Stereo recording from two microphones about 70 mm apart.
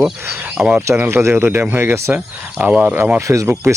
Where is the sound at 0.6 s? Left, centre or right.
Right.